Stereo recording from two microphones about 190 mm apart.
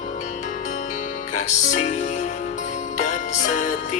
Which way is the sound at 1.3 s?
40° left (ahead or behind).